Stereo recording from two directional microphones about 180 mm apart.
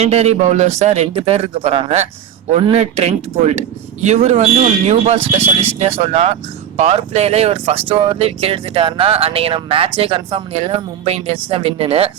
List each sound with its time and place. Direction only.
0.0 s speech: 35° right (ahead or behind)